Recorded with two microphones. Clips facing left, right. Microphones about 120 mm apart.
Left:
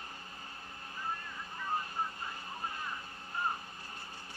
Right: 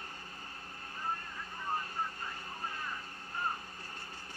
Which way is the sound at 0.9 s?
35° right (ahead or behind).